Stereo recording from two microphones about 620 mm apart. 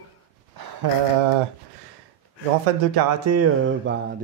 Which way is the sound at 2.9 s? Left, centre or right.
Right.